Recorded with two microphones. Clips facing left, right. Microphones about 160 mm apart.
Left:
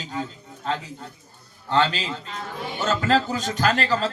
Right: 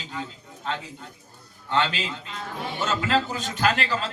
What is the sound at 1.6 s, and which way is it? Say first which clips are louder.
A man's voice: left 3 dB; 35° left (ahead or behind).